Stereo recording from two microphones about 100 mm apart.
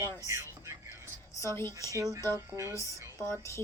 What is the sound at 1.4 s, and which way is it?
Speech, 25° left (ahead or behind).